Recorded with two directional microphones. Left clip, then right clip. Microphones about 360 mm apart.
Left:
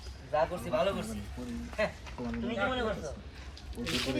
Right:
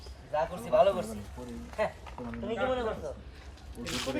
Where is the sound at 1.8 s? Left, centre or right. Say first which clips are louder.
Right 1 dB; right.